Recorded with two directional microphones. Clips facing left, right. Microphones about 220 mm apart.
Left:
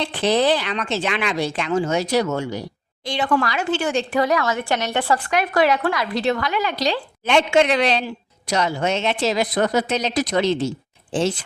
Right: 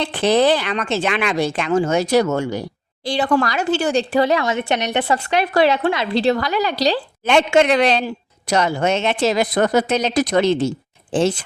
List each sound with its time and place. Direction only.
0.1 s a woman's voice: 55° right (ahead or behind)
3.0 s speech: 35° right (ahead or behind)
7.3 s a woman's voice: 50° right (ahead or behind)